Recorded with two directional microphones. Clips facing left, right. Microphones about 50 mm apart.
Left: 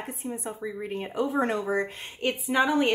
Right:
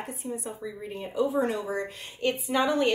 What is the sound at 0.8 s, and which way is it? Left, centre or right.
Speech, left.